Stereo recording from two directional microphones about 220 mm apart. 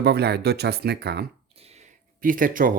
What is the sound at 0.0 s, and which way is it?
Speech, 50° right (ahead or behind).